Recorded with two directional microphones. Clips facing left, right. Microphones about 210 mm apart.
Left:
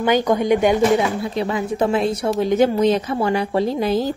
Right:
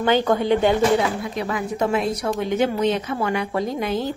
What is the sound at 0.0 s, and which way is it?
Speech, 15° left (ahead or behind).